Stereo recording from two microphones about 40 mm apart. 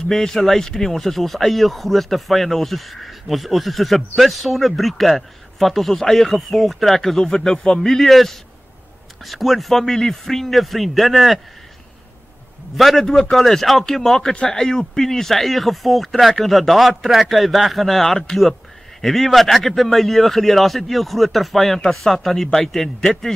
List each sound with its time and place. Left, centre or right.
0.1 s speech: centre
12.7 s speech: centre
14.3 s a man's voice: left
14.6 s speech: centre